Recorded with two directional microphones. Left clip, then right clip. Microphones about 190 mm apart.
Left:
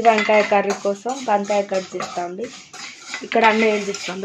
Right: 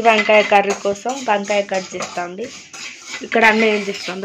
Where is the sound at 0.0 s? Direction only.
Centre (ahead or behind).